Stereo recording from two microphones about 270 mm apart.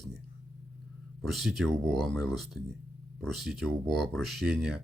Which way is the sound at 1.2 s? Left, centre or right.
Centre.